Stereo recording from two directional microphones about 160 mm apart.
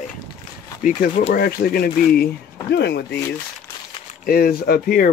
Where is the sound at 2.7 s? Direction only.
90° left.